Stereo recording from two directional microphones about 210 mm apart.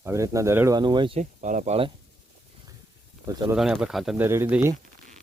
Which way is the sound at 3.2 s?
15° right (ahead or behind).